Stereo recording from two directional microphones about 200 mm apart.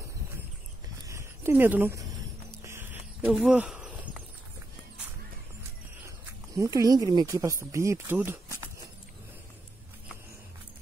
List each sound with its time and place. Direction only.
1.0 s a sound: 15° right (ahead or behind)
3.3 s speech: 5° right (ahead or behind)
6.0 s speech: 15° right (ahead or behind)